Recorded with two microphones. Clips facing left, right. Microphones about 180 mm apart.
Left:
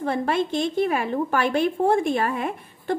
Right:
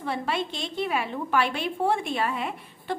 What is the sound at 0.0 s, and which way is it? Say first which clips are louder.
A woman's voice: left 6 dB; 50° left (ahead or behind).